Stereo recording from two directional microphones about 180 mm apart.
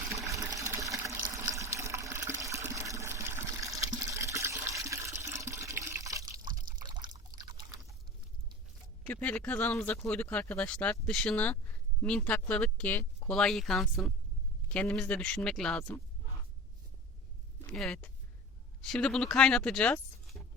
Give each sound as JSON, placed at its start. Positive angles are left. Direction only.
{"t": 0.3, "sound": "water", "side_deg": -15}
{"t": 6.3, "sound": "water", "side_deg": -50}
{"t": 6.8, "sound": "liquid", "side_deg": -25}
{"t": 9.0, "sound": "speech", "side_deg": 5}
{"t": 17.7, "sound": "speech", "side_deg": 5}